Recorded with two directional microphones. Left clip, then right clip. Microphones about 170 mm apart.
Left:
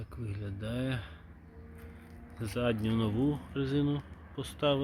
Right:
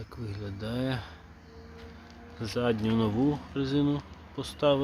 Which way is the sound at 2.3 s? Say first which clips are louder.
Right 4 dB; 10° right (ahead or behind).